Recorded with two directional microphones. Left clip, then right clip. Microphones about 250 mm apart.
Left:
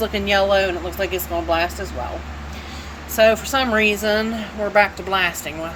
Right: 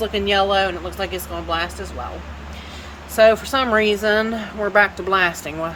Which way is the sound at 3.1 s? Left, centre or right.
Centre.